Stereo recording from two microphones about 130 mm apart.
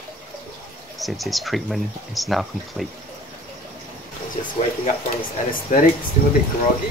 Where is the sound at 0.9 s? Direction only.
Centre (ahead or behind).